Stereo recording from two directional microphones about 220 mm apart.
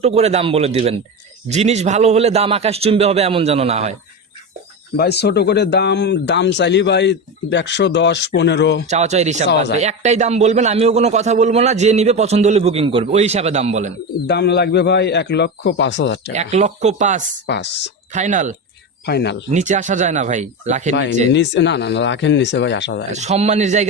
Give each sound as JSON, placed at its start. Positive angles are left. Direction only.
{"t": 0.0, "sound": "a man's voice", "side_deg": -30}
{"t": 4.9, "sound": "speech", "side_deg": 50}
{"t": 8.9, "sound": "a man's voice", "side_deg": -30}
{"t": 14.3, "sound": "speech", "side_deg": 50}
{"t": 16.3, "sound": "a man's voice", "side_deg": -30}
{"t": 17.4, "sound": "speech", "side_deg": 50}
{"t": 18.1, "sound": "a man's voice", "side_deg": -35}
{"t": 19.0, "sound": "speech", "side_deg": 50}
{"t": 19.5, "sound": "a man's voice", "side_deg": -35}
{"t": 20.9, "sound": "speech", "side_deg": 55}
{"t": 23.1, "sound": "a man's voice", "side_deg": -30}